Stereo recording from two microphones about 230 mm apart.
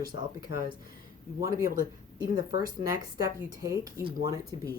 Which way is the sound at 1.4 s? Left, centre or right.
Centre.